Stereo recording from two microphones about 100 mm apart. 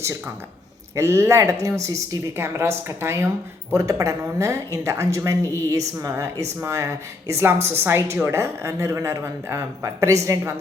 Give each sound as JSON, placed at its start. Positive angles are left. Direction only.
{"t": 0.9, "sound": "a man's voice", "side_deg": -25}